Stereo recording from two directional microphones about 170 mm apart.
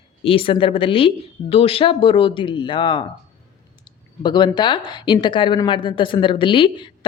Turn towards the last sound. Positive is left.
turn(degrees=30)  # may be behind; listen again after turning